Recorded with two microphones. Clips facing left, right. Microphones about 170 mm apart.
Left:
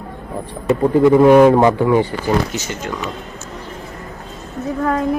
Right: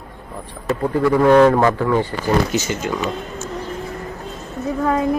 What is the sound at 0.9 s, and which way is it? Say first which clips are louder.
A man's voice: left 3 dB; 20° left (ahead or behind).